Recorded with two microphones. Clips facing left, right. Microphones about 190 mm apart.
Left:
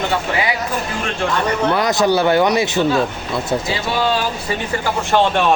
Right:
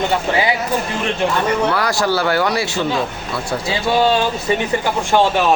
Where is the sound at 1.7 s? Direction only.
20° left (ahead or behind).